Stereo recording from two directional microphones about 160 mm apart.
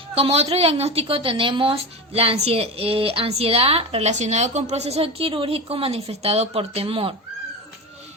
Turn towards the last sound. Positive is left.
turn(degrees=-35)  # may be behind; listen again after turning